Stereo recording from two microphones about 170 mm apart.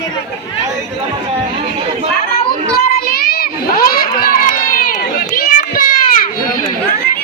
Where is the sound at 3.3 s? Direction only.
60° left (ahead or behind).